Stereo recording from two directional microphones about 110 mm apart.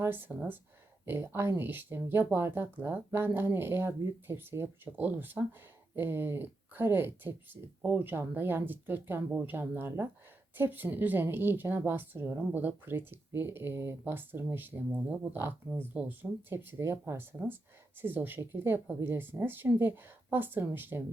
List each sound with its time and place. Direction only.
0.0 s a woman's voice: 20° right (ahead or behind)